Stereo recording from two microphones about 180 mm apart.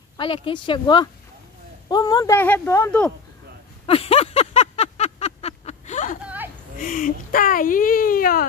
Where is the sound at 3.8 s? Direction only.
30° left (ahead or behind).